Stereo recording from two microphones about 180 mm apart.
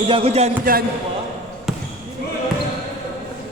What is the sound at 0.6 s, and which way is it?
Speech, 55° right (ahead or behind).